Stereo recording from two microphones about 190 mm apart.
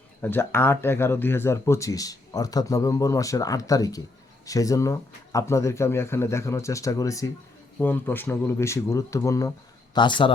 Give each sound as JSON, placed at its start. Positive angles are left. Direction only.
{"t": 0.2, "sound": "speech", "side_deg": 10}